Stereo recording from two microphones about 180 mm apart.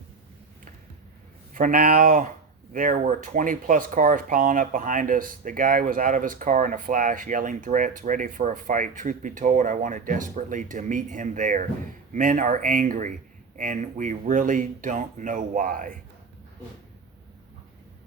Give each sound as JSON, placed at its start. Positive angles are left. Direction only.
{"t": 1.5, "sound": "speech", "side_deg": -50}